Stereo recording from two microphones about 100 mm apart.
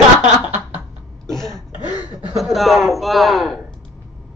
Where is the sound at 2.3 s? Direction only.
Centre (ahead or behind).